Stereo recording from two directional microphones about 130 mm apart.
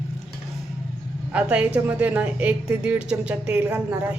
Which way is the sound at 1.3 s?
10° right (ahead or behind).